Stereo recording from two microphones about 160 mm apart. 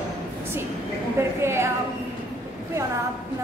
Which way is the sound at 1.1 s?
15° right (ahead or behind).